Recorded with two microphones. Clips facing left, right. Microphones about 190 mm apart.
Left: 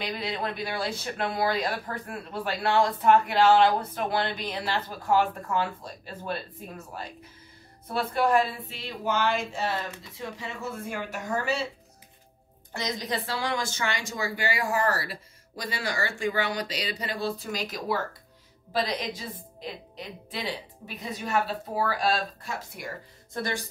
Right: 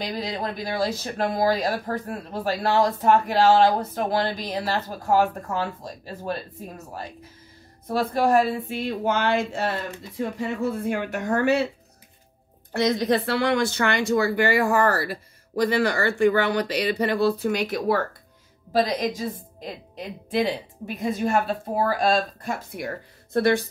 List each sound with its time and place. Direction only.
0.0 s speech: 40° right (ahead or behind)
7.9 s speech: 40° right (ahead or behind); by 11.6 s 60° right (ahead or behind)
12.7 s speech: 60° right (ahead or behind)
18.7 s a woman's voice: 45° right (ahead or behind); by 23.6 s 65° right (ahead or behind)